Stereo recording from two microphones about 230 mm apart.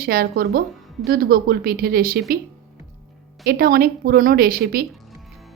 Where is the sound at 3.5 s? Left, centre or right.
Right.